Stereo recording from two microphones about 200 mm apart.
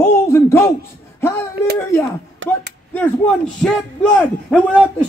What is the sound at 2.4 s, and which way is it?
Speech, 75° right (ahead or behind).